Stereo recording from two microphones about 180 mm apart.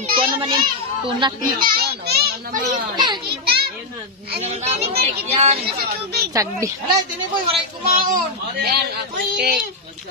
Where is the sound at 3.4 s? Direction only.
60° right (ahead or behind).